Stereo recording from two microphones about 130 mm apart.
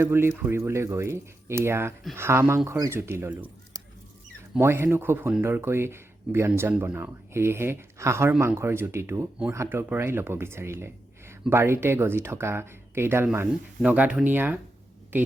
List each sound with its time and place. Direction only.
0.0 s speech: 20° right (ahead or behind)
4.6 s speech: 20° right (ahead or behind)